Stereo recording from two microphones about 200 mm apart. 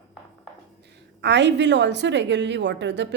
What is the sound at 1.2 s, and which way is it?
A woman's voice, 60° right (ahead or behind).